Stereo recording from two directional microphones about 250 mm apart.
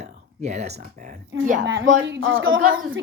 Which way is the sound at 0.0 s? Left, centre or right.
Right.